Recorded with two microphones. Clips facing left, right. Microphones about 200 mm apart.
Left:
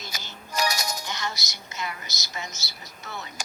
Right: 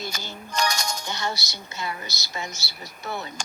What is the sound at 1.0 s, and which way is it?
A woman's voice, 30° right (ahead or behind).